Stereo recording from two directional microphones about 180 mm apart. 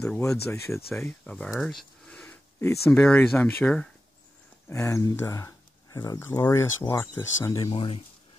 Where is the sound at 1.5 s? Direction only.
Centre (ahead or behind).